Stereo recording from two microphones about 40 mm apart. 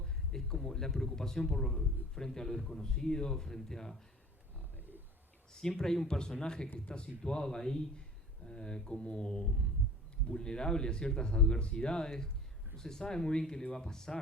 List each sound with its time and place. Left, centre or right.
0.0 s speech: centre
4.8 s roaring cats: right
5.5 s speech: centre